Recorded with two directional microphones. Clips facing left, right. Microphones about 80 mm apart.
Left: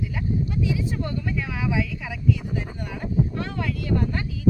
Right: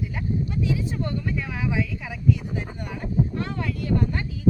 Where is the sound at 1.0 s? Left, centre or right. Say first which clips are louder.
Even; right.